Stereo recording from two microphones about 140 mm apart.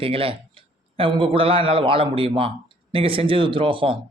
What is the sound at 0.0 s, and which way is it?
Speech, 40° right (ahead or behind).